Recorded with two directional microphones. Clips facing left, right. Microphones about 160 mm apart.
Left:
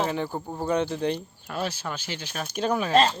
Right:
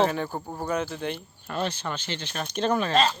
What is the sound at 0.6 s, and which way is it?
Speech, 30° left (ahead or behind).